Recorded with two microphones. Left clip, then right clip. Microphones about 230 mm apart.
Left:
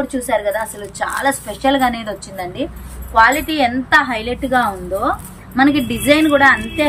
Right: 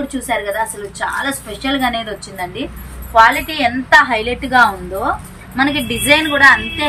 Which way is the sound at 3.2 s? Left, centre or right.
Centre.